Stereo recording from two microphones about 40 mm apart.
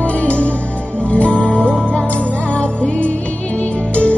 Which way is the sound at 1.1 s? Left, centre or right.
Left.